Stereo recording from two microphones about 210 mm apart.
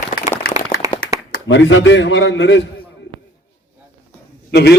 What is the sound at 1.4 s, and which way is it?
Speech, 65° left (ahead or behind).